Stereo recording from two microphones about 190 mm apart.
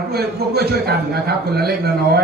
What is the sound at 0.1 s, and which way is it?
A man's voice, 55° right (ahead or behind).